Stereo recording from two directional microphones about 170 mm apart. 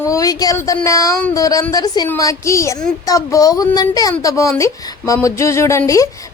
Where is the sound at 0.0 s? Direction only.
20° left (ahead or behind).